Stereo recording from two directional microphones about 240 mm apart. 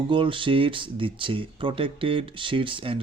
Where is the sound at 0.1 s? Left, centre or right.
Right.